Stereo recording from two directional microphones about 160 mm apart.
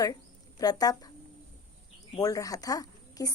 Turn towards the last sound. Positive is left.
turn(degrees=20)  # may be behind; listen again after turning